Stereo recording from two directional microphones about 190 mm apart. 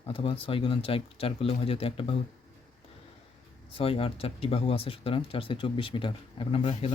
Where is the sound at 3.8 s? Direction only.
30° left (ahead or behind).